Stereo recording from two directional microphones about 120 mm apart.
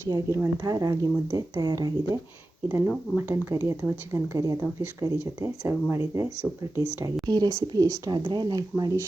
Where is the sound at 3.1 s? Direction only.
20° right (ahead or behind).